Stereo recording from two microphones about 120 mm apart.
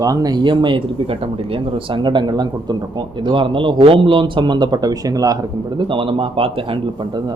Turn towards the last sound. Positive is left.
turn(degrees=-50)  # may be behind; listen again after turning